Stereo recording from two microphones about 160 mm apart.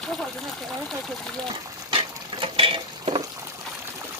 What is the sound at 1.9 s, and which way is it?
Stir, 35° right (ahead or behind).